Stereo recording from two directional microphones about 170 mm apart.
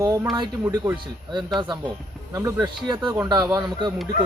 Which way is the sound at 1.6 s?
25° right (ahead or behind).